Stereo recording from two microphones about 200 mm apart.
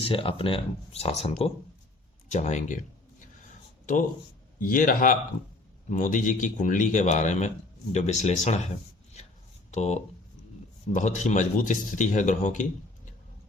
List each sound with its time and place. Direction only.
0.0 s speech: 25° left (ahead or behind)
4.6 s speech: 45° left (ahead or behind)
9.7 s speech: 35° left (ahead or behind)